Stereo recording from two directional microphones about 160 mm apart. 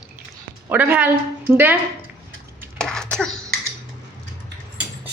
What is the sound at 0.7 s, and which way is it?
A woman's voice, 10° right (ahead or behind).